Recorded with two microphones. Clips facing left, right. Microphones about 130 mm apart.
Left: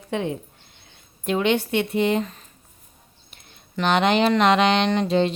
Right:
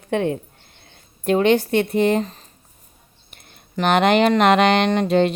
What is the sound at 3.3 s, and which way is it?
Speech, 55° right (ahead or behind).